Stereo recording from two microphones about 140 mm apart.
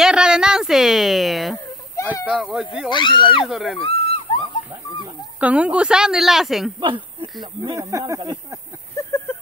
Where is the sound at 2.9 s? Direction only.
35° left (ahead or behind).